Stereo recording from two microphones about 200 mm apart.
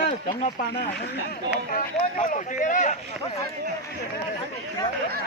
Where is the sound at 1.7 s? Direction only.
40° left (ahead or behind).